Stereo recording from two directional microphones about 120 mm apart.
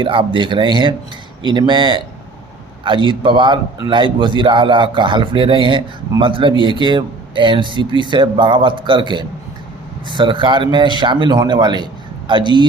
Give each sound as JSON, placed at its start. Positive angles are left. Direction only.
{"t": 0.0, "sound": "a man's voice", "side_deg": -45}